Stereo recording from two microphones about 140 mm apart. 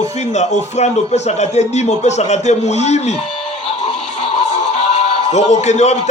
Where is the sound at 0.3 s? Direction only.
55° left (ahead or behind).